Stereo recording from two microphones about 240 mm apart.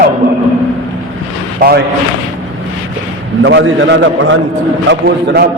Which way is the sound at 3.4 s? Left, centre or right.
Right.